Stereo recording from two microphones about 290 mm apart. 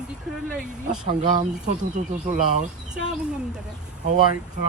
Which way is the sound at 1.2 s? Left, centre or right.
Centre.